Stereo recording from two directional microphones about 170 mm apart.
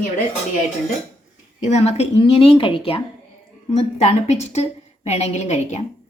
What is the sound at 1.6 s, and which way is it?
A woman's voice, 40° left (ahead or behind).